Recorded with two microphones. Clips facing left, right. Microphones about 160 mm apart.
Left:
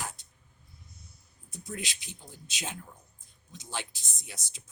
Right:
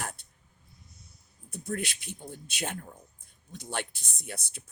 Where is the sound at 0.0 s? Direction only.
60° right (ahead or behind).